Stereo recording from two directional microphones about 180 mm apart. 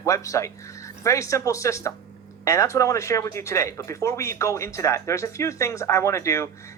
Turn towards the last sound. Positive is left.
turn(degrees=15)  # may be behind; listen again after turning